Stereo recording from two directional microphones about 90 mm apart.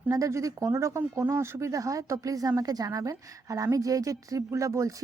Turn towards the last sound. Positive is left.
turn(degrees=-35)  # may be behind; listen again after turning